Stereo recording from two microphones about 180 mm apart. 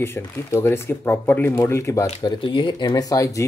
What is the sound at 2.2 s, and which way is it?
Speech, 25° left (ahead or behind).